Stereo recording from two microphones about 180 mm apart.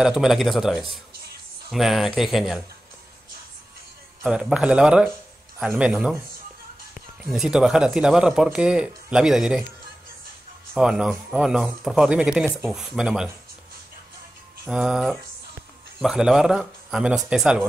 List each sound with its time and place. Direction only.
0.0 s speech: centre (ahead or behind)
1.1 s music: 60° right (ahead or behind)
1.7 s speech: centre (ahead or behind)
4.2 s speech: 5° right (ahead or behind)
7.2 s speech: centre (ahead or behind)
10.7 s speech: 5° right (ahead or behind)
14.7 s speech: 5° right (ahead or behind)